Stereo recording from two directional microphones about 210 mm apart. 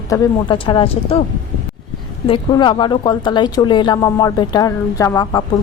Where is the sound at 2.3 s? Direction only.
20° left (ahead or behind).